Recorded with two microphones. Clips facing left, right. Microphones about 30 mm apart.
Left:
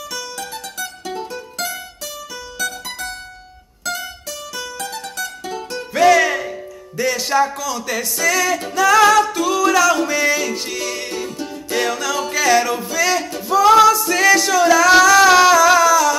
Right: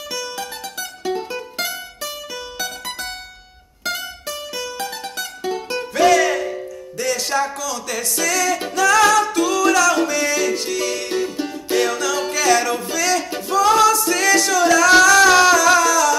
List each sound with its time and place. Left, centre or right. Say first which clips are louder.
0.1 s music: right 2 dB; centre
3.8 s music: even; centre
5.2 s music: right 3 dB; centre
5.9 s music: left 2 dB; centre